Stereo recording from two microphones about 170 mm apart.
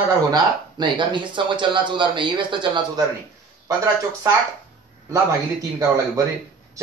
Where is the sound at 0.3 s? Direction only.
25° right (ahead or behind).